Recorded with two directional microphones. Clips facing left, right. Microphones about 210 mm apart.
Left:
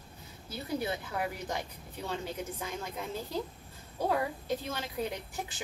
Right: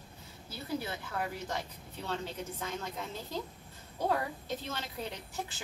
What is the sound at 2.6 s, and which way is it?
A woman's voice, 10° left (ahead or behind).